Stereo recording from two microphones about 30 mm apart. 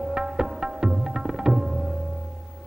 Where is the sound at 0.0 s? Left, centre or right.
Centre.